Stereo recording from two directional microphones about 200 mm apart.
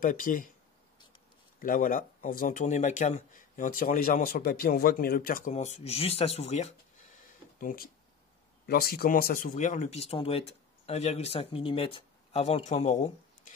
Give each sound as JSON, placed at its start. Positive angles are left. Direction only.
{"t": 0.0, "sound": "speech", "side_deg": 40}
{"t": 1.6, "sound": "speech", "side_deg": 45}
{"t": 7.6, "sound": "speech", "side_deg": 45}